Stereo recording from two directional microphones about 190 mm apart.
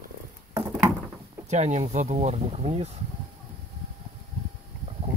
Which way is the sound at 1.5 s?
35° right (ahead or behind).